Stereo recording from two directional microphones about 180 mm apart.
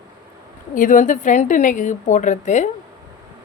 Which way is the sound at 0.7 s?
45° left (ahead or behind).